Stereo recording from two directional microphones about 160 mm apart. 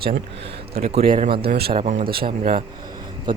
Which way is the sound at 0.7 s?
40° right (ahead or behind).